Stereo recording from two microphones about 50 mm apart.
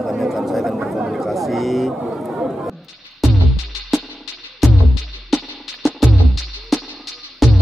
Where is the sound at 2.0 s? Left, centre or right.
Centre.